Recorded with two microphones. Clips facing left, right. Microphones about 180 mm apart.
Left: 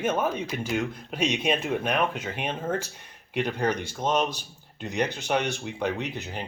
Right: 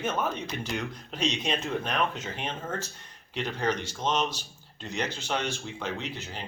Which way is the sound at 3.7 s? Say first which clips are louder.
Left 3 dB; 55° left (ahead or behind).